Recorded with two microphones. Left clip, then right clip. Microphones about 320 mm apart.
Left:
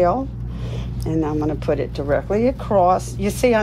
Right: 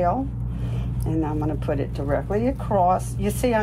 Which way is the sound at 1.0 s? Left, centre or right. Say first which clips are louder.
Left 5 dB; left.